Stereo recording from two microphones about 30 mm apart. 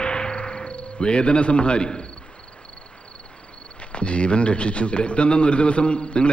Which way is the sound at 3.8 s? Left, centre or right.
Left.